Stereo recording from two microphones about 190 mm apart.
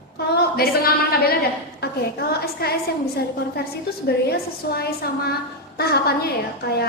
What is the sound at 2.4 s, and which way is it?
Speech, 55° left (ahead or behind).